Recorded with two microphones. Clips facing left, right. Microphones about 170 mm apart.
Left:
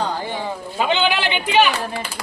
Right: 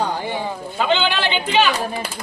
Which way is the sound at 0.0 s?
15° right (ahead or behind).